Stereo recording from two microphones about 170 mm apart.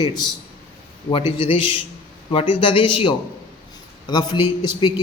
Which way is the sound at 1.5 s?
30° left (ahead or behind).